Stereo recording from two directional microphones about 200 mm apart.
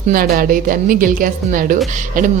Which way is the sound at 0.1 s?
45° right (ahead or behind).